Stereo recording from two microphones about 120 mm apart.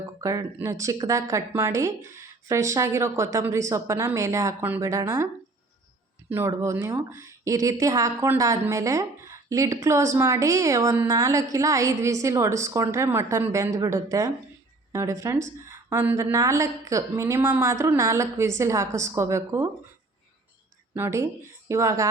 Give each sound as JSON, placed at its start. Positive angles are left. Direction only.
{"t": 0.2, "sound": "speech", "side_deg": -30}
{"t": 20.9, "sound": "speech", "side_deg": -20}